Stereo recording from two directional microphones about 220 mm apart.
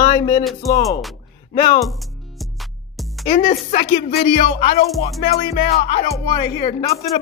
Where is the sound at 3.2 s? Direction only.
30° left (ahead or behind).